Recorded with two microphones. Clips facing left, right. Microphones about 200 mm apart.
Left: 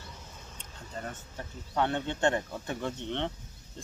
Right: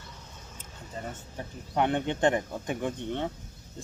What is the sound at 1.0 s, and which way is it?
Speech, 5° right (ahead or behind).